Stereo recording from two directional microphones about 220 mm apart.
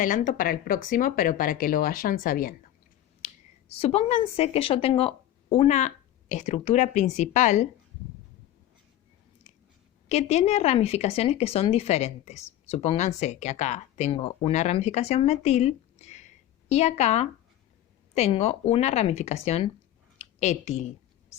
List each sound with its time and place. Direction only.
0.0 s speech: 35° left (ahead or behind)
3.8 s speech: 25° left (ahead or behind)
10.1 s speech: 30° left (ahead or behind)